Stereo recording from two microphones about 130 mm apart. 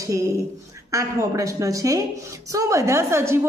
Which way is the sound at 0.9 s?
25° right (ahead or behind).